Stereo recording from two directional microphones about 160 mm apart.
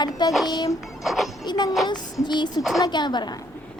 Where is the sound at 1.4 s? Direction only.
25° left (ahead or behind).